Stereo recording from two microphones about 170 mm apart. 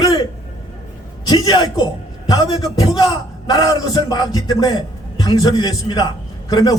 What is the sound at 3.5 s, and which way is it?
A man's voice, 20° left (ahead or behind).